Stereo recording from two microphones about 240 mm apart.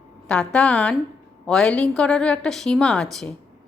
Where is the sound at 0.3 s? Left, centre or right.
Centre.